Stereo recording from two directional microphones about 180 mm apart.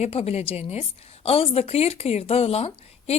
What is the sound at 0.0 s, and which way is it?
A woman's voice, 35° left (ahead or behind).